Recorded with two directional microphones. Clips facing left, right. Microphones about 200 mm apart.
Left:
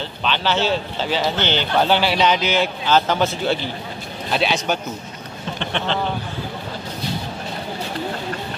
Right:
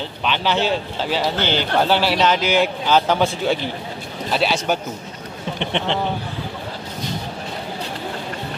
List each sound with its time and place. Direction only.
0.2 s speech: 10° right (ahead or behind)
4.3 s speech: 5° right (ahead or behind)
5.6 s speech: 20° right (ahead or behind)